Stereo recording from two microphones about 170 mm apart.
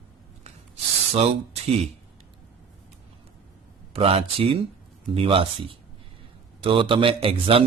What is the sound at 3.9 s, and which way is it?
Speech, 35° right (ahead or behind).